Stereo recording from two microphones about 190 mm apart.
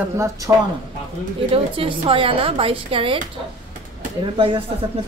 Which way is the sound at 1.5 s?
30° right (ahead or behind).